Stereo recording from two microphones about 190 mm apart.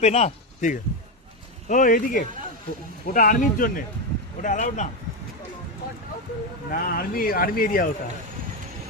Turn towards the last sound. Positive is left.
turn(degrees=50)  # may be behind; listen again after turning